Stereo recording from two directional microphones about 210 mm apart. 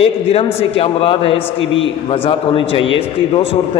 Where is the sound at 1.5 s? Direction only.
65° left (ahead or behind).